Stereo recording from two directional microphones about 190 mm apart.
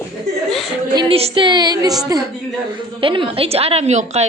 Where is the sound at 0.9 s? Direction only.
25° right (ahead or behind).